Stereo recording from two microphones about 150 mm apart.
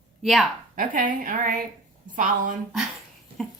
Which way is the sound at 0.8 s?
65° right (ahead or behind).